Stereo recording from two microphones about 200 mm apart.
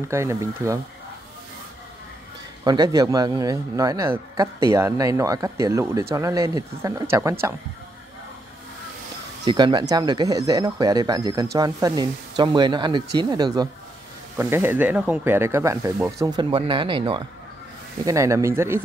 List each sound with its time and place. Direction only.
0.1 s speech: 15° right (ahead or behind)
2.6 s speech: 20° right (ahead or behind)
9.4 s speech: 25° right (ahead or behind)